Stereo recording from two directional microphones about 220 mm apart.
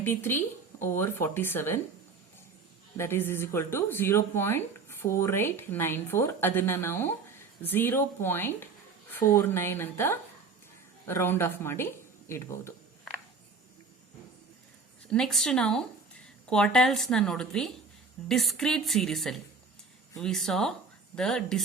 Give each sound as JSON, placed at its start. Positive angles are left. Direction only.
{"t": 0.0, "sound": "speech", "side_deg": 10}
{"t": 3.0, "sound": "speech", "side_deg": 10}
{"t": 15.1, "sound": "a woman's voice", "side_deg": 5}